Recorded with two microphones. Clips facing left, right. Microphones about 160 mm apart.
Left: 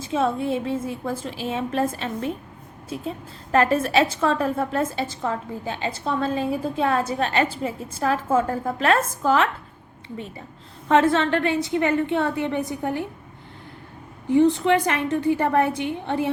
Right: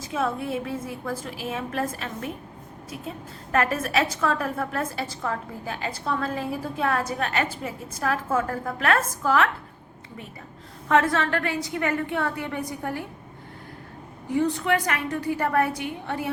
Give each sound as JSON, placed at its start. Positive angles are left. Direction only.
{"t": 0.0, "sound": "a woman's voice", "side_deg": 25}
{"t": 10.8, "sound": "a woman's voice", "side_deg": 25}
{"t": 14.3, "sound": "a woman's voice", "side_deg": 25}